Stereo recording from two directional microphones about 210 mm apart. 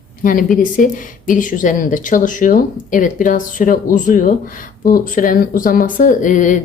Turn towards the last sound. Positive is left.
turn(degrees=40)  # may be behind; listen again after turning